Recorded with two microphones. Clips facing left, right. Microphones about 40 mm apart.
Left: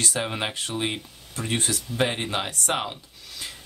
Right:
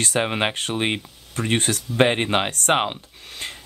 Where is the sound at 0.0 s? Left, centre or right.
Right.